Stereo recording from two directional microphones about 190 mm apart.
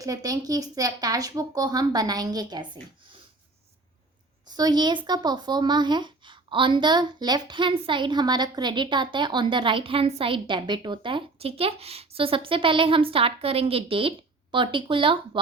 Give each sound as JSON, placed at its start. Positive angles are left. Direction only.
{"t": 0.0, "sound": "speech", "side_deg": -20}
{"t": 4.4, "sound": "speech", "side_deg": -20}